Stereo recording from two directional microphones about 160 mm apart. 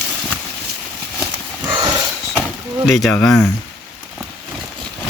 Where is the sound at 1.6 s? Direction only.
25° right (ahead or behind).